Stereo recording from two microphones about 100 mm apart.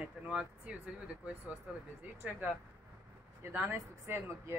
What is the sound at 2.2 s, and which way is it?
Speech, 15° right (ahead or behind).